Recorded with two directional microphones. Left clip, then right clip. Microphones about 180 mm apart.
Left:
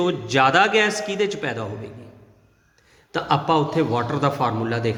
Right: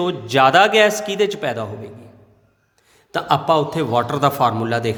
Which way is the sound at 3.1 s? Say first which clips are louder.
Right 3 dB; 35° right (ahead or behind).